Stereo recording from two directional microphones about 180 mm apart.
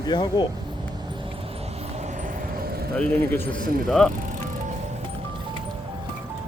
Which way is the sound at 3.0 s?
10° left (ahead or behind).